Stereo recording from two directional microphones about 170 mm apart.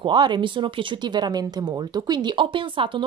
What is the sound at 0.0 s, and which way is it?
Speech, 25° right (ahead or behind).